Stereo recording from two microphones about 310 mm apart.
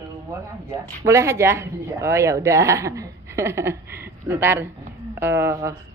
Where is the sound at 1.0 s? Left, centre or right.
Centre.